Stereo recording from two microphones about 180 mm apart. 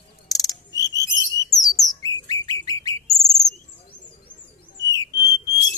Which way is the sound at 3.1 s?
Centre (ahead or behind).